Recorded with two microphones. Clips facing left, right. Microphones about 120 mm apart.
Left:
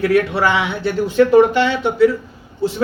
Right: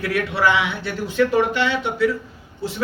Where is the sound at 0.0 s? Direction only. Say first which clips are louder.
Left 5 dB; 35° left (ahead or behind).